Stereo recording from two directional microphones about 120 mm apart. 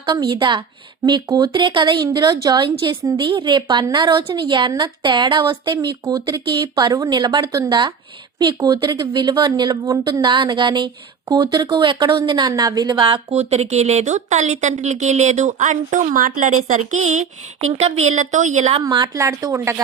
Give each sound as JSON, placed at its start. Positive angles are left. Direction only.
{"t": 0.0, "sound": "a woman's voice", "side_deg": -40}
{"t": 13.3, "sound": "speech", "side_deg": -65}
{"t": 17.7, "sound": "speech", "side_deg": -65}
{"t": 18.9, "sound": "speech", "side_deg": -30}